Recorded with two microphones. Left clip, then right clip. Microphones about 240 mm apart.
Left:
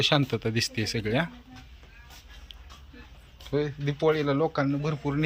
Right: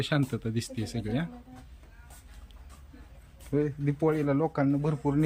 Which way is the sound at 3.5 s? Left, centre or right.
Right.